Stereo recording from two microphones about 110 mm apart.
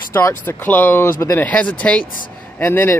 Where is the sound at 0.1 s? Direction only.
20° left (ahead or behind).